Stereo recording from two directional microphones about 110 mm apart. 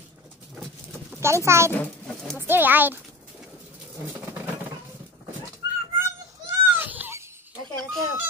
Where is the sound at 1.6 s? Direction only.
15° left (ahead or behind).